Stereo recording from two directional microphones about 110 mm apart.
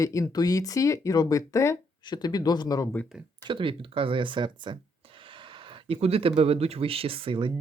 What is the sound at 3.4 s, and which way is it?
Speech, 50° right (ahead or behind).